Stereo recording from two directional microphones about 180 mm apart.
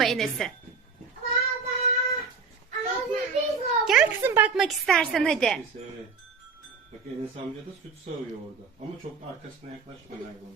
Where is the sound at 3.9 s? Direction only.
5° right (ahead or behind).